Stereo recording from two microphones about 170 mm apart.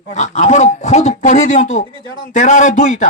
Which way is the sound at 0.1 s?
45° left (ahead or behind).